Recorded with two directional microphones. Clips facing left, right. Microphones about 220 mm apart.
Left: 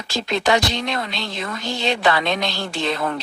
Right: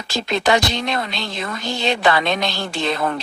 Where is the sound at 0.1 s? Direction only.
50° right (ahead or behind).